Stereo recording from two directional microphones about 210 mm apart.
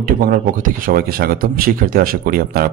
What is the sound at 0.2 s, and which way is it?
A man's voice, 40° right (ahead or behind).